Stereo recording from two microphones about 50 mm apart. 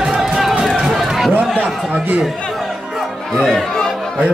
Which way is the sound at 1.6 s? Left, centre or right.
Right.